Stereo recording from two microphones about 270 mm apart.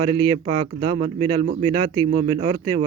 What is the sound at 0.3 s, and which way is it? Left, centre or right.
Speech, centre.